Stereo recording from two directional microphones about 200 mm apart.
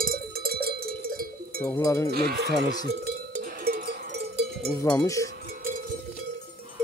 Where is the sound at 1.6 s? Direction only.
15° left (ahead or behind).